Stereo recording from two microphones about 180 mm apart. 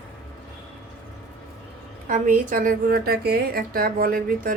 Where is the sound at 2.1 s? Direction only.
50° right (ahead or behind).